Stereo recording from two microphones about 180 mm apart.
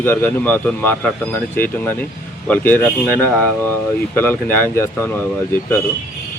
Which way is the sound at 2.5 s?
10° left (ahead or behind).